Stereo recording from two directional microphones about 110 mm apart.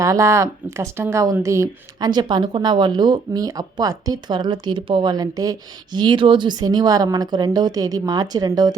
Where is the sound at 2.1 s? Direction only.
45° right (ahead or behind).